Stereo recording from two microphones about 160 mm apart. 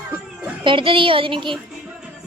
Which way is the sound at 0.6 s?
30° right (ahead or behind).